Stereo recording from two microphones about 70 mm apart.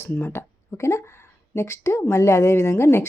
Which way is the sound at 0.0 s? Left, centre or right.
Left.